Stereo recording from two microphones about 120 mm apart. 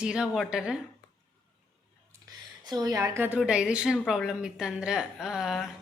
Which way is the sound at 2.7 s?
30° right (ahead or behind).